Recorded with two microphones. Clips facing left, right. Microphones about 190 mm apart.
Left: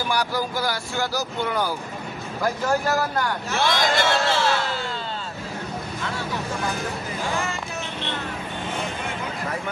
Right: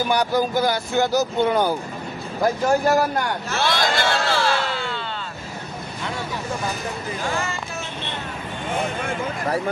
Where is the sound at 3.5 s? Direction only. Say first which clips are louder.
Even; 15° left (ahead or behind).